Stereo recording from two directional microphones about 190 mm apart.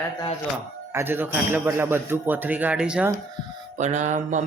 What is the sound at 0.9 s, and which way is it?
A man's voice, 10° right (ahead or behind).